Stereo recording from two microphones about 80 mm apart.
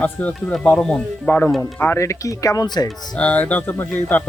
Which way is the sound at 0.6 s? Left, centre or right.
Centre.